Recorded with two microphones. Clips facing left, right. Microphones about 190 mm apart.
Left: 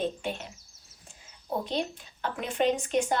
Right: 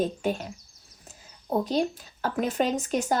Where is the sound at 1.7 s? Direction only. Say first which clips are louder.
Right 5 dB; 40° right (ahead or behind).